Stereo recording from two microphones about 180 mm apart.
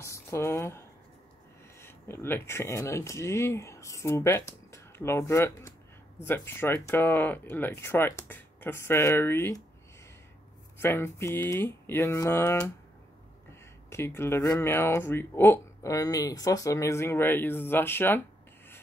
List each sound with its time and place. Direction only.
0.0 s speech: 15° left (ahead or behind)
10.8 s speech: 15° left (ahead or behind)
13.8 s speech: 15° left (ahead or behind)